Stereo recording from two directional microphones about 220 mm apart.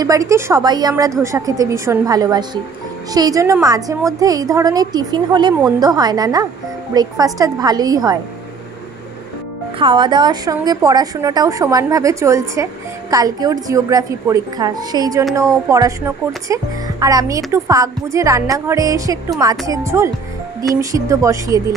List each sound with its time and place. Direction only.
0.0 s a woman's voice: 15° right (ahead or behind)
9.8 s a woman's voice: 20° right (ahead or behind)
16.4 s a woman's voice: 15° right (ahead or behind)